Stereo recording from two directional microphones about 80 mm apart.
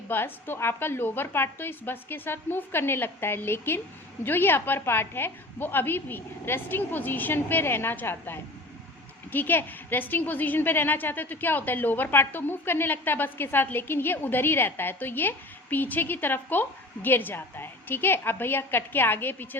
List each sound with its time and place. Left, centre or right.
0.1 s a woman's voice: left